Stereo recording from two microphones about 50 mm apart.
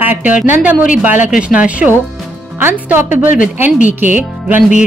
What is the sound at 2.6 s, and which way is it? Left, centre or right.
Speech, right.